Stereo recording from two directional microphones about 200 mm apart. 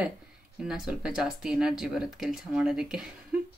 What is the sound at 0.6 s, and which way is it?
Speech, centre (ahead or behind).